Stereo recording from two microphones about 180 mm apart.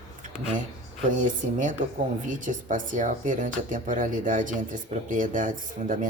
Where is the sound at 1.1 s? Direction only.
45° right (ahead or behind).